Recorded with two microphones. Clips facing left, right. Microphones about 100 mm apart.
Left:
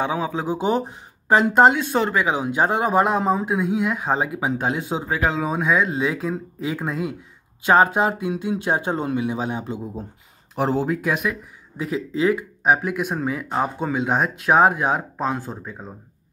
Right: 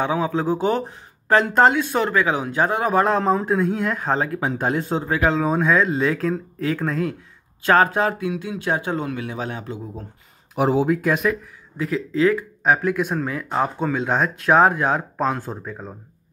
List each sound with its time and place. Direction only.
0.0 s speech: 20° left (ahead or behind)
10.5 s speech: 5° right (ahead or behind)
11.7 s speech: 20° left (ahead or behind); by 15.9 s centre (ahead or behind)